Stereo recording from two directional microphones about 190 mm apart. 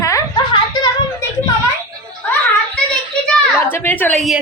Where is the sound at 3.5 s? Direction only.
10° left (ahead or behind).